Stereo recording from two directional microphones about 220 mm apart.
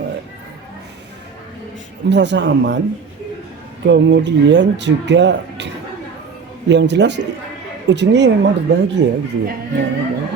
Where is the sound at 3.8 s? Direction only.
55° right (ahead or behind).